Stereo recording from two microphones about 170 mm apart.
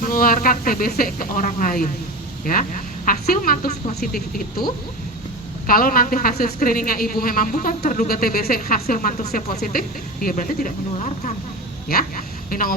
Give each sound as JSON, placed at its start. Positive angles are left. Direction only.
{"t": 0.0, "sound": "speech", "side_deg": 55}
{"t": 5.6, "sound": "speech", "side_deg": 55}
{"t": 11.9, "sound": "a woman's voice", "side_deg": 60}